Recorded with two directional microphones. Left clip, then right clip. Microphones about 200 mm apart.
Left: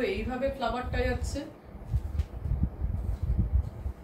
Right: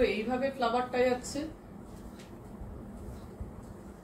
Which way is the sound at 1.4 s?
20° left (ahead or behind).